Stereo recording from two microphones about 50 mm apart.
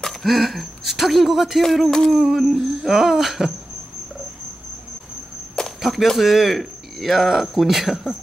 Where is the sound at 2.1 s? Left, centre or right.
Centre.